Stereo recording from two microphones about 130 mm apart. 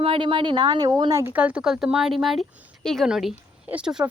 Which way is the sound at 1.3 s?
10° right (ahead or behind).